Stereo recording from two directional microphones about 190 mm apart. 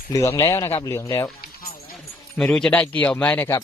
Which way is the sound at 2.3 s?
5° left (ahead or behind).